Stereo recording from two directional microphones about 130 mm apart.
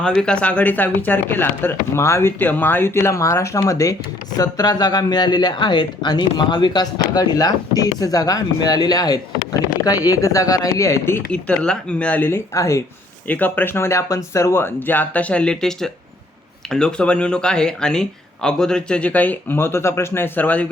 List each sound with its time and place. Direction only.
0.0 s speech: 5° left (ahead or behind)
11.3 s speech: 10° left (ahead or behind)